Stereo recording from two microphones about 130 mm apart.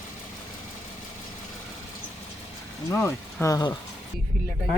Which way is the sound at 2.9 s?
20° left (ahead or behind).